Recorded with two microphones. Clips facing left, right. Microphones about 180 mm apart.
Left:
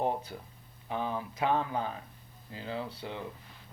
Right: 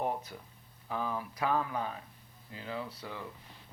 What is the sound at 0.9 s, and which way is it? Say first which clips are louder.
Speech: left 2 dB; 25° left (ahead or behind).